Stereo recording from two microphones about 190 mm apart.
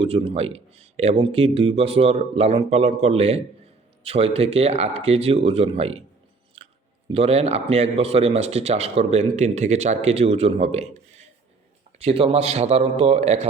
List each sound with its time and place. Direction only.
0.0 s speech: 30° right (ahead or behind)
6.6 s chewing: 30° right (ahead or behind)
7.1 s speech: 30° right (ahead or behind)